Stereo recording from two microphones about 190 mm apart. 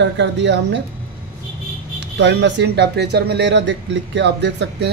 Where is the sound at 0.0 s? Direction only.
65° right (ahead or behind).